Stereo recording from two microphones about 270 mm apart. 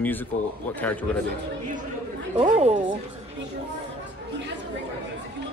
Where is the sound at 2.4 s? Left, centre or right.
Right.